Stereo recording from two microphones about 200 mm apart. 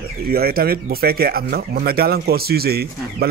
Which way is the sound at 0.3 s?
50° right (ahead or behind).